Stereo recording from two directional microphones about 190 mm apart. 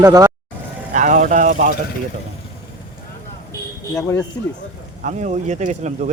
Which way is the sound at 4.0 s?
15° left (ahead or behind).